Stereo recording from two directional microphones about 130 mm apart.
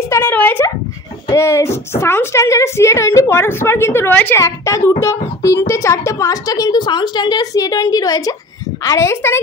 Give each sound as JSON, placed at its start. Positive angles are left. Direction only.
{"t": 0.1, "sound": "speech", "side_deg": 15}